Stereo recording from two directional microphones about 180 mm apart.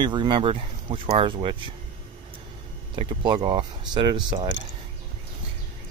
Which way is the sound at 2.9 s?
25° right (ahead or behind).